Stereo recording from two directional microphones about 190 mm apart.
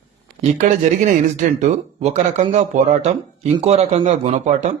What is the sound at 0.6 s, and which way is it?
A man's voice, 40° right (ahead or behind).